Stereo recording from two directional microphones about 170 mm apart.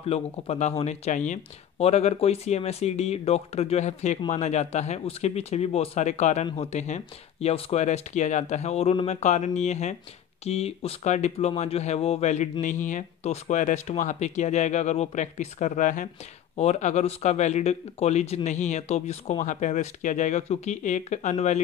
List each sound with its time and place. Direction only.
0.0 s speech: 40° left (ahead or behind)